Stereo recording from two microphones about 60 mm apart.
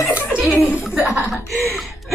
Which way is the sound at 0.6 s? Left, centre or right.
Left.